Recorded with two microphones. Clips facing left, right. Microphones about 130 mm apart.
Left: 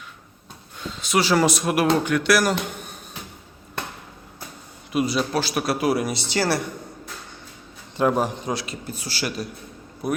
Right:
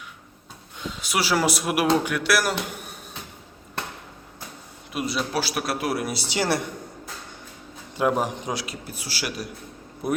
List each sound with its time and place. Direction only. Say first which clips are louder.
0.8 s speech: left 4 dB; 10° right (ahead or behind)
4.9 s speech: left 5 dB; centre (ahead or behind); by 6.7 s 20° right (ahead or behind)
7.9 s a man's voice: left 2 dB; 10° right (ahead or behind)
10.0 s a man's voice: even; 20° right (ahead or behind)